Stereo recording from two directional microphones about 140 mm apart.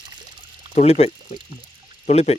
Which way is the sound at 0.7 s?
50° left (ahead or behind).